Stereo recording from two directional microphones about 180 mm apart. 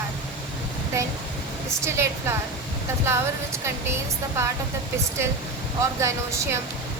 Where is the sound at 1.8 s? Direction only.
15° right (ahead or behind).